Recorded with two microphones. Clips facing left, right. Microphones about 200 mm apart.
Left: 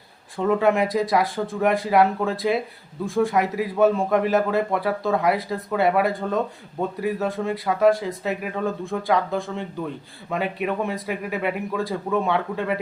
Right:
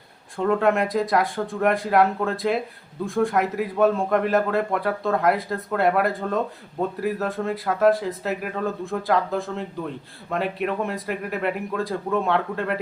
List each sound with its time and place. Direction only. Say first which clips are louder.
0.3 s a man's voice: left 1 dB; centre (ahead or behind)